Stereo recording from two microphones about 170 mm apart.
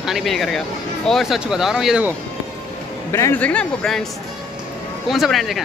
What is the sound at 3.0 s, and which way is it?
A man's voice, 15° left (ahead or behind).